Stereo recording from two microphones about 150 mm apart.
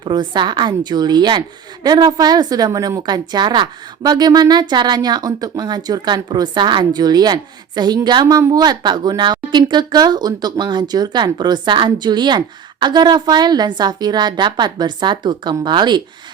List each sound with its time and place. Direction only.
0.0 s a woman's voice: 30° right (ahead or behind)